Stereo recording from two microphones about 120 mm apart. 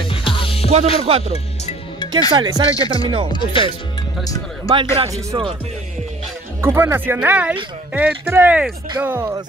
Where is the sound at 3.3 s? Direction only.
45° left (ahead or behind).